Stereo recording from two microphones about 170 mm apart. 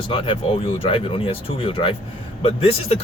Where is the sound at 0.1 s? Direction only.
30° left (ahead or behind).